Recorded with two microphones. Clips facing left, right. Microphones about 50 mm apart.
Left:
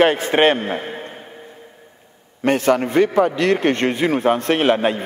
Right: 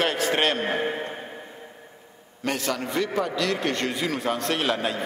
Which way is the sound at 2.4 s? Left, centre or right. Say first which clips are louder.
Left 11 dB; left.